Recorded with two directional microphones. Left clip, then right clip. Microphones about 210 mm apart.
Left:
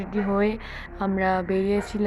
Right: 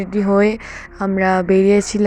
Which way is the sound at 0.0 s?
30° right (ahead or behind).